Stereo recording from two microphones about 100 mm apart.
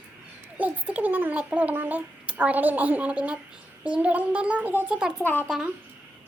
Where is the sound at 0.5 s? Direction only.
15° right (ahead or behind).